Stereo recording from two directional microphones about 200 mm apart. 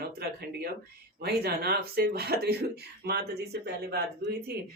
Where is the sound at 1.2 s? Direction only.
55° right (ahead or behind).